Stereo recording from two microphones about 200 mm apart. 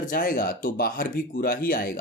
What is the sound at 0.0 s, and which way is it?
Speech, 45° left (ahead or behind).